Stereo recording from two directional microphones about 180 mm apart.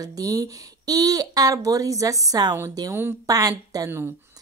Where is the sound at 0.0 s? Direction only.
20° right (ahead or behind).